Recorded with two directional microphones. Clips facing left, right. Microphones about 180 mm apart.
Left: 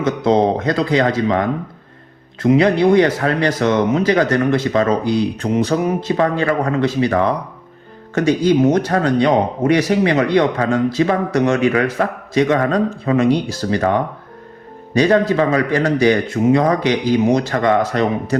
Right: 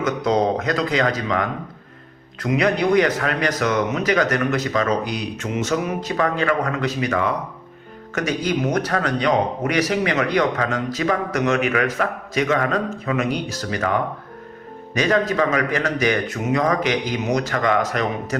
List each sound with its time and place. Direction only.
0.0 s speech: 30° left (ahead or behind)